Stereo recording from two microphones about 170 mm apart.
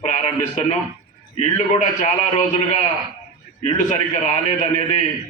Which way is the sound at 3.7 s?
45° left (ahead or behind).